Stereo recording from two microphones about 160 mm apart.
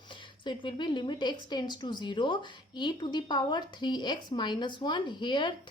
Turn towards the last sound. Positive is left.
turn(degrees=30)  # may be behind; listen again after turning